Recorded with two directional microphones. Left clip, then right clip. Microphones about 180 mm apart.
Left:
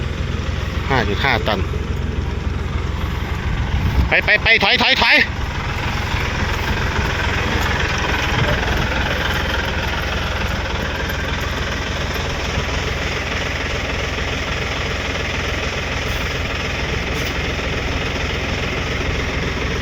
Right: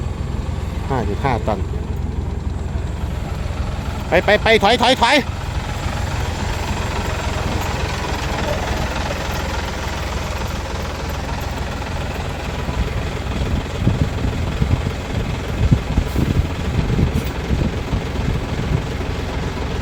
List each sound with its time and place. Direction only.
0.9 s speech: 10° right (ahead or behind)
4.1 s speech: 20° right (ahead or behind)